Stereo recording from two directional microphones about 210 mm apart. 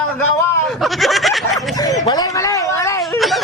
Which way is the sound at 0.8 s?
Centre (ahead or behind).